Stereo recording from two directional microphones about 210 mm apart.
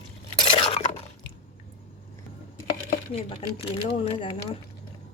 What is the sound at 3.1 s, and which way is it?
Speech, 25° left (ahead or behind).